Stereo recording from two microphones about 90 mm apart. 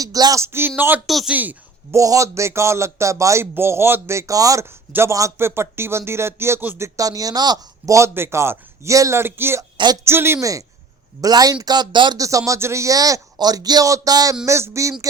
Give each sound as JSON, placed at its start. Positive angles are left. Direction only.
{"t": 0.0, "sound": "speech", "side_deg": -45}
{"t": 0.4, "sound": "speech", "side_deg": -25}
{"t": 1.0, "sound": "a woman's voice", "side_deg": 0}
{"t": 1.3, "sound": "speech", "side_deg": -20}
{"t": 1.9, "sound": "speech", "side_deg": -35}
{"t": 4.9, "sound": "speech", "side_deg": -25}
{"t": 6.7, "sound": "speech", "side_deg": -35}
{"t": 7.9, "sound": "speech", "side_deg": -30}
{"t": 9.7, "sound": "speech", "side_deg": -55}
{"t": 10.0, "sound": "speech", "side_deg": -25}
{"t": 11.2, "sound": "speech", "side_deg": -45}
{"t": 12.1, "sound": "speech", "side_deg": -40}
{"t": 14.4, "sound": "speech", "side_deg": -30}